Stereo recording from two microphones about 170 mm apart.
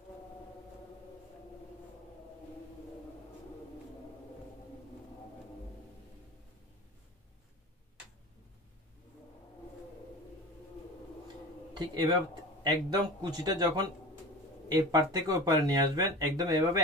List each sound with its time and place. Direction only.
11.7 s speech: 25° right (ahead or behind)